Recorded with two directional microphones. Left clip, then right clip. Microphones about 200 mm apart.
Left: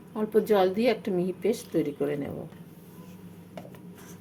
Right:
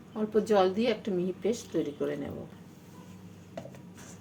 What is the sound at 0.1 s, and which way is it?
A woman's voice, 20° left (ahead or behind).